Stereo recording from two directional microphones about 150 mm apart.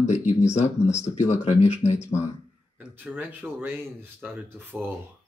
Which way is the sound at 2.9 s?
10° right (ahead or behind).